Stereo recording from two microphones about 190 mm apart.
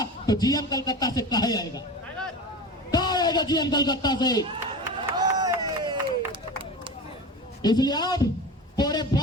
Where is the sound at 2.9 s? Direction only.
20° left (ahead or behind).